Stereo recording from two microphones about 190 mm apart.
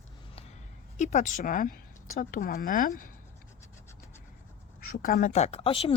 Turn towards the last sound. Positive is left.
turn(degrees=30)  # may be behind; listen again after turning